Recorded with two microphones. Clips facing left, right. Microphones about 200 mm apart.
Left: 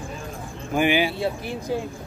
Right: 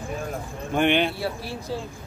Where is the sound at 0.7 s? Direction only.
5° left (ahead or behind).